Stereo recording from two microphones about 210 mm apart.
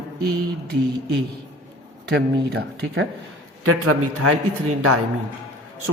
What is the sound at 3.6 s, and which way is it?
Speech, 90° right.